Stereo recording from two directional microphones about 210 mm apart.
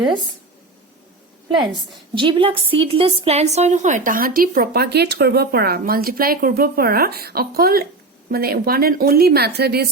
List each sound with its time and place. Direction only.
1.5 s a woman's voice: 20° right (ahead or behind); by 9.9 s 50° right (ahead or behind)